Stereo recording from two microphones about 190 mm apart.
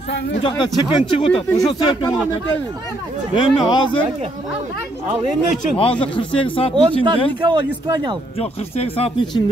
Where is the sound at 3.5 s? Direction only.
25° left (ahead or behind).